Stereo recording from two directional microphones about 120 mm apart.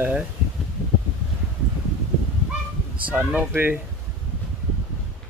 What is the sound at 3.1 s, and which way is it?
Speech, 15° right (ahead or behind).